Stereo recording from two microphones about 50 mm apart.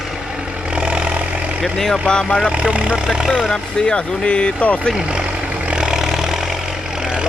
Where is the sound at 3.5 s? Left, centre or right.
Centre.